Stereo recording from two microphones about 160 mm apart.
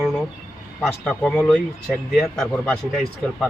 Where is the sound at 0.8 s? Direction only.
5° left (ahead or behind).